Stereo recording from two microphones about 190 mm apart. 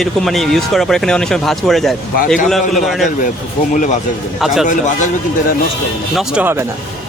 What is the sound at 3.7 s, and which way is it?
Speech, 40° left (ahead or behind).